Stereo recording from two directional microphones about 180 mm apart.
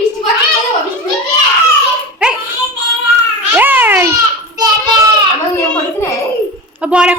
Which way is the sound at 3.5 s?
10° right (ahead or behind).